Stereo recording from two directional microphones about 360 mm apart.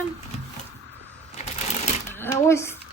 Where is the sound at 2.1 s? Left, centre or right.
Centre.